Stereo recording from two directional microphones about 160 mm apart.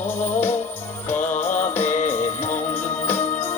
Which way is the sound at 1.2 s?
45° left (ahead or behind).